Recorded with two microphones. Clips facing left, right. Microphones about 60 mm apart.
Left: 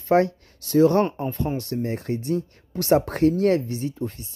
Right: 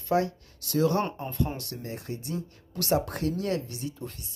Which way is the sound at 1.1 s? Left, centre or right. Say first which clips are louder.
Left 5 dB; left.